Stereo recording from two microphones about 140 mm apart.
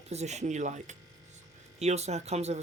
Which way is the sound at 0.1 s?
50° right (ahead or behind).